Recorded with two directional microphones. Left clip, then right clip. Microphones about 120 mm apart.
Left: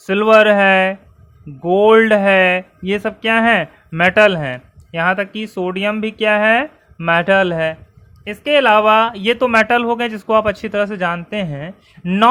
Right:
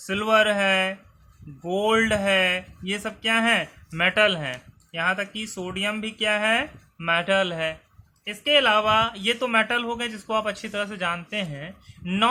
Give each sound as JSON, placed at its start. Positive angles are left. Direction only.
{"t": 0.0, "sound": "speech", "side_deg": 45}
{"t": 1.6, "sound": "speech", "side_deg": 40}